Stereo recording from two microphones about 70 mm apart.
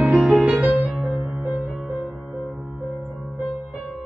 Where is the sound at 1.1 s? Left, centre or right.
Centre.